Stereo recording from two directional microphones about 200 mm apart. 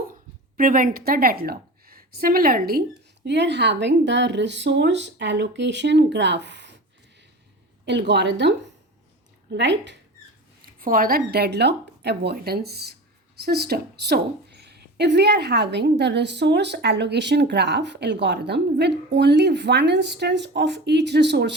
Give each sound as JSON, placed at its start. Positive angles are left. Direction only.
{"t": 0.1, "sound": "a woman's voice", "side_deg": -45}
{"t": 3.2, "sound": "a woman's voice", "side_deg": -60}
{"t": 7.9, "sound": "a woman's voice", "side_deg": -60}
{"t": 10.8, "sound": "a woman's voice", "side_deg": -45}